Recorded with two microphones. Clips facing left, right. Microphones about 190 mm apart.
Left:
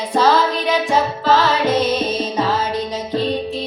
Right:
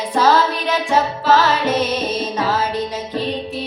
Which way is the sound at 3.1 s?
10° right (ahead or behind).